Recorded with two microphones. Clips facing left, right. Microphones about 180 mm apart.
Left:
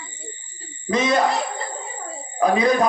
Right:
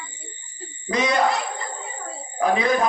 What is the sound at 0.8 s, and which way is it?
Speech, 25° left (ahead or behind).